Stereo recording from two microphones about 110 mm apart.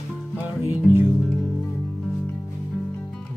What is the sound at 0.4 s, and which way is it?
Music, 15° right (ahead or behind).